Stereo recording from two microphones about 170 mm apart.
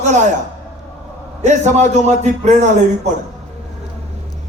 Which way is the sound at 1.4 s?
45° right (ahead or behind).